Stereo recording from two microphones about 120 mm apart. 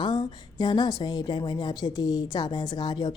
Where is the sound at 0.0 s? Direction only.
40° left (ahead or behind).